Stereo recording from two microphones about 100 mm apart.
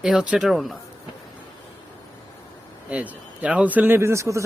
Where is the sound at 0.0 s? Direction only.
5° right (ahead or behind).